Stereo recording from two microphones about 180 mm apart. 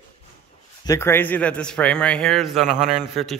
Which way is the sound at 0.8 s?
15° left (ahead or behind).